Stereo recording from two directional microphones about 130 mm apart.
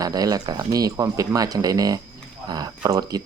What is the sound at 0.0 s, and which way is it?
Speech, 30° right (ahead or behind).